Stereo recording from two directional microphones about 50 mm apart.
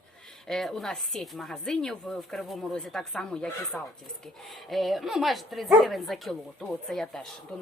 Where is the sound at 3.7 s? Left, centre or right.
Left.